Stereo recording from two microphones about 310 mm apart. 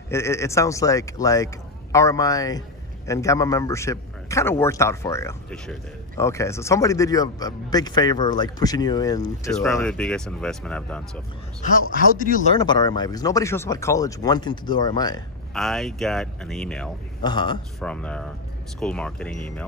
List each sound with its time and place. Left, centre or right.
0.1 s a man's voice: centre
11.9 s speech: left
12.5 s a man's voice: centre
15.5 s speech: centre
17.2 s a man's voice: centre
17.7 s speech: centre